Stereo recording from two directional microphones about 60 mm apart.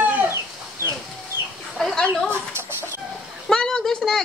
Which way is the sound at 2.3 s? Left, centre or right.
Right.